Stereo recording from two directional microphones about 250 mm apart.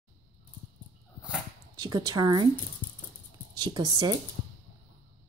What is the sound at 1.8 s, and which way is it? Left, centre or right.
Speech, centre.